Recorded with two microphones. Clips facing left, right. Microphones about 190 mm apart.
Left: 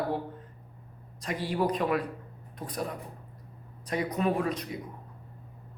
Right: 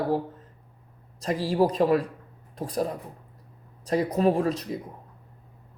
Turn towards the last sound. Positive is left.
turn(degrees=-40)  # may be behind; listen again after turning